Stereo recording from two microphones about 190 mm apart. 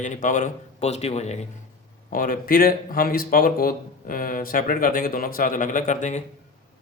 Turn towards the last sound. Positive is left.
turn(degrees=40)  # may be behind; listen again after turning